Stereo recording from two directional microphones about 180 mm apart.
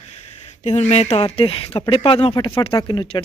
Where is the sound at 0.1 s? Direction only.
35° left (ahead or behind).